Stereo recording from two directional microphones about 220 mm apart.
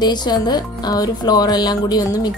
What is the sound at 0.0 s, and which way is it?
Speech, 20° left (ahead or behind).